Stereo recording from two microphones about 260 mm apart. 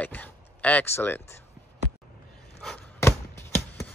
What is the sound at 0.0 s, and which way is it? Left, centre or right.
Speech, centre.